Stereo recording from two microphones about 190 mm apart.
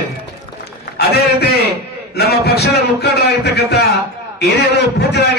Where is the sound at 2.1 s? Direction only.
55° left (ahead or behind).